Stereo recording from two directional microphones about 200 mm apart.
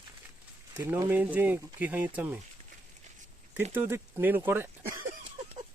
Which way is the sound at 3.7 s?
10° right (ahead or behind).